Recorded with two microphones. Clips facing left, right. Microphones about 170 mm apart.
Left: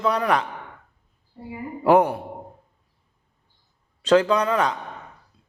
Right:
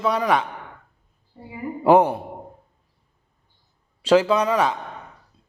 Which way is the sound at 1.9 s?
25° right (ahead or behind).